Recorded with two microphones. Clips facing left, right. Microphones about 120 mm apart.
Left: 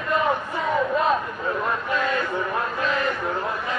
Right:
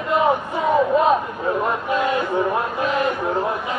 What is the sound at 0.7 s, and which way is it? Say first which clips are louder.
Crowd: right 5 dB; 20° right (ahead or behind).